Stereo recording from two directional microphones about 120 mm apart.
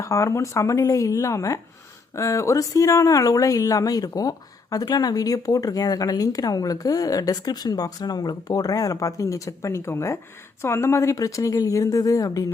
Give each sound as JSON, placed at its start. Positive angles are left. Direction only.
{"t": 0.0, "sound": "speech", "side_deg": 25}